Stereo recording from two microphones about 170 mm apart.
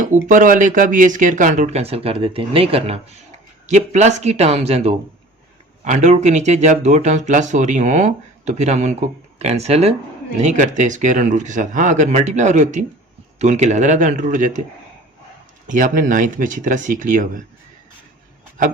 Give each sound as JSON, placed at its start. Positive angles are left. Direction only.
{"t": 0.0, "sound": "speech", "side_deg": -50}
{"t": 15.6, "sound": "speech", "side_deg": -50}